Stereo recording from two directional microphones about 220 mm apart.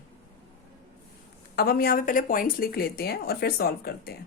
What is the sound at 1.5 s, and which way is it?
Speech, 45° left (ahead or behind).